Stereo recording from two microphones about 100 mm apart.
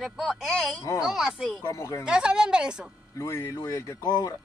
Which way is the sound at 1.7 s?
30° left (ahead or behind).